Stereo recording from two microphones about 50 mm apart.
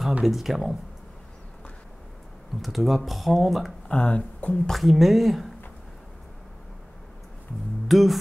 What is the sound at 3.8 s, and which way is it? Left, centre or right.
Speech, left.